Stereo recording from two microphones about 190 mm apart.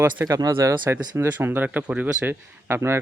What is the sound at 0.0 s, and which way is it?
A man's voice, 15° right (ahead or behind).